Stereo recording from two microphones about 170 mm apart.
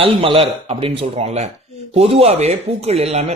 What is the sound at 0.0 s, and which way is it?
Speech, 35° right (ahead or behind).